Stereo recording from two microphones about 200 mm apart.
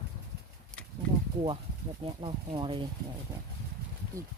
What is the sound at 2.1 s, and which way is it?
Speech, 25° right (ahead or behind).